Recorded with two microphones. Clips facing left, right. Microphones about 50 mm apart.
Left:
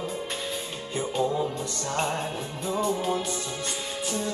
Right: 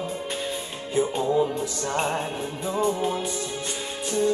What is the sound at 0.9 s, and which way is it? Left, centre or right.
Music, centre.